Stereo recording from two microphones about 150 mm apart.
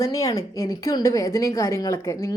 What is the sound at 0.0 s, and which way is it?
A woman's voice, 20° left (ahead or behind).